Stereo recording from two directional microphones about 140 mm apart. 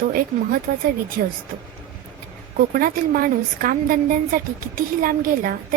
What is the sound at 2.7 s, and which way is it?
A woman's voice, 90° right.